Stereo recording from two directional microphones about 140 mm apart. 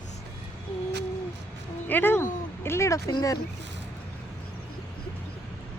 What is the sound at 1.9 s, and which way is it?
Speech, 15° left (ahead or behind).